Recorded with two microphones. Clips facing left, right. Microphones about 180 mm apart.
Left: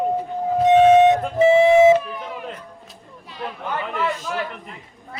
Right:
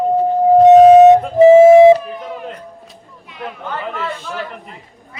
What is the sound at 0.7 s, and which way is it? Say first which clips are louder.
Flute: right 6 dB; 40° right (ahead or behind).